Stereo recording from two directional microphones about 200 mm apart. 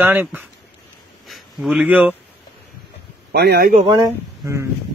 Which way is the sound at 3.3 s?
50° right (ahead or behind).